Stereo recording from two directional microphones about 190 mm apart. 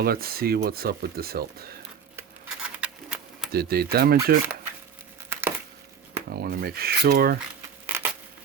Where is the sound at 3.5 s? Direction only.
55° right (ahead or behind).